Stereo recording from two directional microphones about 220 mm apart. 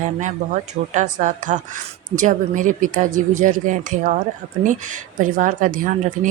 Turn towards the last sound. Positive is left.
turn(degrees=-35)  # may be behind; listen again after turning